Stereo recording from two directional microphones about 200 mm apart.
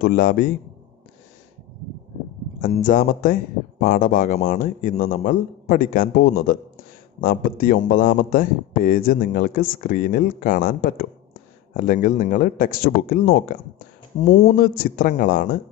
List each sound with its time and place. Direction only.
0.0 s a man's voice: 45° left (ahead or behind)
2.6 s a man's voice: 40° left (ahead or behind)